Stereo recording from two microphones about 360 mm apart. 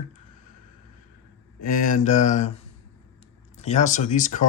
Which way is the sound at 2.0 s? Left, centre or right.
Centre.